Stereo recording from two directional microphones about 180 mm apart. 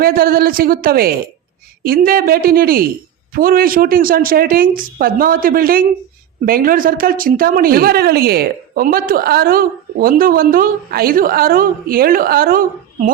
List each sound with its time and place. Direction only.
0.0 s a woman's voice: 55° right (ahead or behind)